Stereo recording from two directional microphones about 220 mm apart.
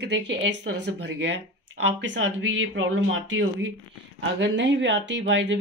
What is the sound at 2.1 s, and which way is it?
Speech, 60° right (ahead or behind).